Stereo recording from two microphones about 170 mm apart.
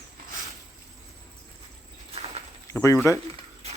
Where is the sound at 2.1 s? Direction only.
35° right (ahead or behind).